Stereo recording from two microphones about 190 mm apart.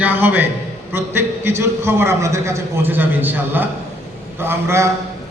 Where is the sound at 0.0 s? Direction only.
10° right (ahead or behind).